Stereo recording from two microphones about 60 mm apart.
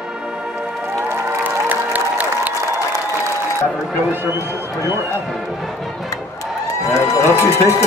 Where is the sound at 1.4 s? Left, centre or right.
Right.